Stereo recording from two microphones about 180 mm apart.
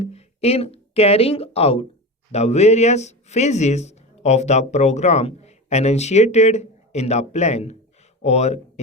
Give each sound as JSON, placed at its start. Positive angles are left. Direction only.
{"t": 0.0, "sound": "speech", "side_deg": 35}